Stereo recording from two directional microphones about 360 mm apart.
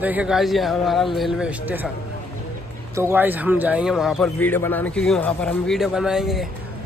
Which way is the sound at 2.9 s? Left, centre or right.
Centre.